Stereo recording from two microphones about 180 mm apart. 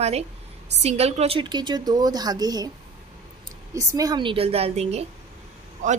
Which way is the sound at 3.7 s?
20° right (ahead or behind).